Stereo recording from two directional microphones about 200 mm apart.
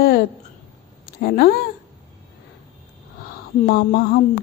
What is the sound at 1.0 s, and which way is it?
Speech, 50° left (ahead or behind).